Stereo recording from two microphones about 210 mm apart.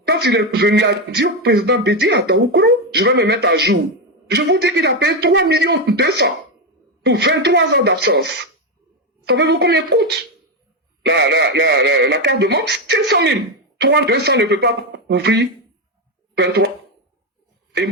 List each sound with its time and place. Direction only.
0.0 s speech: 50° right (ahead or behind)